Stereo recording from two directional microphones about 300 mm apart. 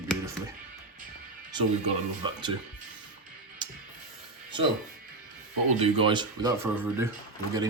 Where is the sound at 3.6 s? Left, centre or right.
Centre.